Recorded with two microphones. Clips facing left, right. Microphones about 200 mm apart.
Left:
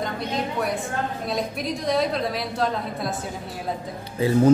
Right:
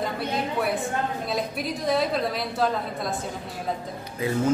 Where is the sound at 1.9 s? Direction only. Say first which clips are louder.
Left 1 dB; centre (ahead or behind).